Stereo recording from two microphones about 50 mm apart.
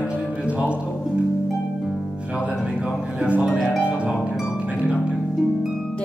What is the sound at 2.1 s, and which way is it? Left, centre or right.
Music, right.